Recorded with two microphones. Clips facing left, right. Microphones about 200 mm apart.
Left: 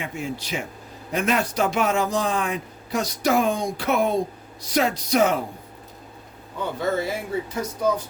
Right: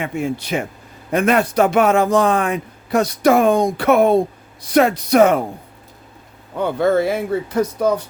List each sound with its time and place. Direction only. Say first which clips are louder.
0.0 s speech: right 8 dB; 55° right (ahead or behind)
6.6 s speech: right 8 dB; 60° right (ahead or behind)